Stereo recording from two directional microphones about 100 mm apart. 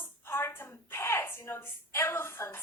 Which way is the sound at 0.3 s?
25° left (ahead or behind).